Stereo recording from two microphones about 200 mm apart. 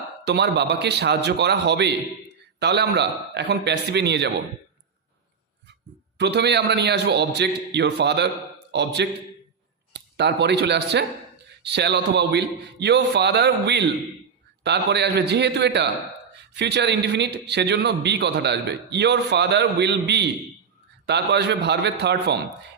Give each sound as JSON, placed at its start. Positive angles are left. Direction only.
{"t": 0.3, "sound": "a man's voice", "side_deg": -60}
{"t": 6.1, "sound": "a man's voice", "side_deg": -55}